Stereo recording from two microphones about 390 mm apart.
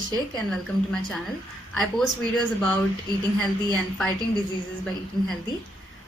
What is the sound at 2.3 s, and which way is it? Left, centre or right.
A woman's voice, centre.